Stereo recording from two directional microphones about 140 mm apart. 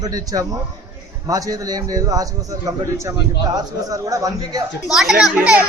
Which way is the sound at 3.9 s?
25° right (ahead or behind).